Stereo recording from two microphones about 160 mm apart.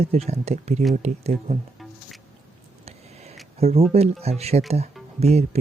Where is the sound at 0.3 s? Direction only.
40° right (ahead or behind).